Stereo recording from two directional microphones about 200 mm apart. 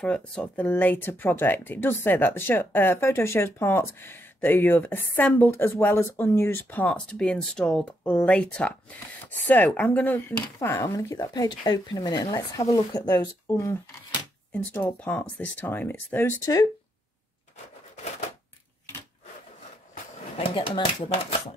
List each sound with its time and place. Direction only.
0.0 s speech: 5° left (ahead or behind)
20.3 s speech: 25° left (ahead or behind)